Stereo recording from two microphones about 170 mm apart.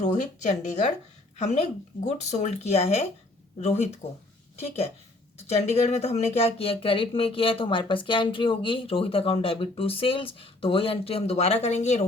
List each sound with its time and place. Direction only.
0.0 s speech: 45° left (ahead or behind)
5.5 s speech: 40° left (ahead or behind)